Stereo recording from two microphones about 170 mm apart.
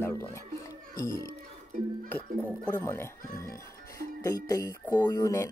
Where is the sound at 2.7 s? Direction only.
15° left (ahead or behind).